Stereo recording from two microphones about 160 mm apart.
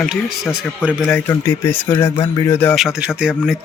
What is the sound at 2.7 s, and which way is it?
Speech, centre (ahead or behind).